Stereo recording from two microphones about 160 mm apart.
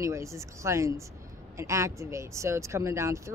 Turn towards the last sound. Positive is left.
turn(degrees=-20)  # may be behind; listen again after turning